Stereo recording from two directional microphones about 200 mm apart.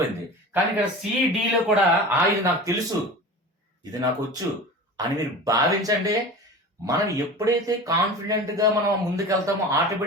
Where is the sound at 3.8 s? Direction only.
20° right (ahead or behind).